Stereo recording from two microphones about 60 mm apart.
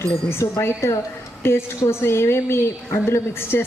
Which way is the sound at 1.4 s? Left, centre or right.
Left.